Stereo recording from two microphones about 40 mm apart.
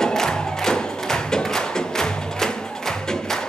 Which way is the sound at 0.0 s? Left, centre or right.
Centre.